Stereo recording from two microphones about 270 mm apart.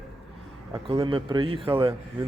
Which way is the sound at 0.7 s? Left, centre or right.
Centre.